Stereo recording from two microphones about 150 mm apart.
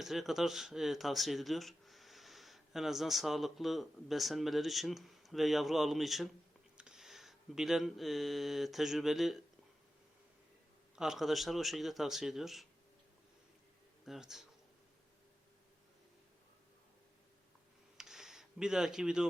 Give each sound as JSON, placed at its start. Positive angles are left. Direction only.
{"t": 0.0, "sound": "speech", "side_deg": 0}
{"t": 10.9, "sound": "speech", "side_deg": -5}
{"t": 14.0, "sound": "speech", "side_deg": 0}
{"t": 17.9, "sound": "a sound", "side_deg": -5}